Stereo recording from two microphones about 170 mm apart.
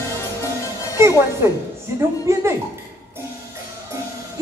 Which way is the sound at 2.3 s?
15° right (ahead or behind).